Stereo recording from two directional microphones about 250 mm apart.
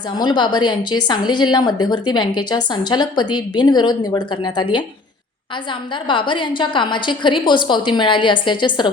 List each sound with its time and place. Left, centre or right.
0.2 s a woman's voice: centre
6.1 s a woman's voice: centre